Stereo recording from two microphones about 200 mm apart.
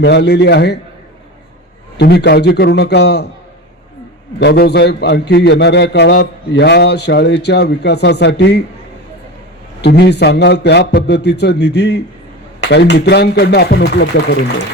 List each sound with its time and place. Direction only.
0.0 s a man's voice: 55° left (ahead or behind)
2.0 s a man's voice: 50° left (ahead or behind)
4.4 s a man's voice: 55° left (ahead or behind)
9.8 s a man's voice: 55° left (ahead or behind)